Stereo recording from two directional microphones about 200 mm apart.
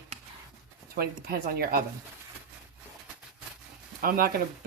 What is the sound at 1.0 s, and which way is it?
Speech, 50° right (ahead or behind).